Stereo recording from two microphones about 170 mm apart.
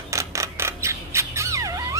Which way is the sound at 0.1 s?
20° right (ahead or behind).